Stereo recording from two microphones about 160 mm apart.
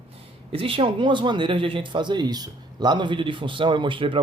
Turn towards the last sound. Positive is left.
turn(degrees=-30)  # may be behind; listen again after turning